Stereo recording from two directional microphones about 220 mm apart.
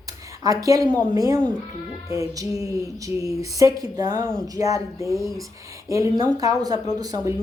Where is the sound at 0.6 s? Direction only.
15° right (ahead or behind).